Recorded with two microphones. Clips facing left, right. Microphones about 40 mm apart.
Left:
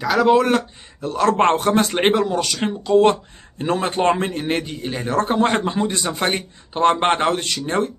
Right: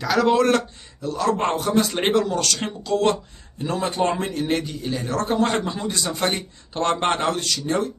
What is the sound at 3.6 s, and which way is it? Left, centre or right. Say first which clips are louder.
A man's voice: left 4 dB; left.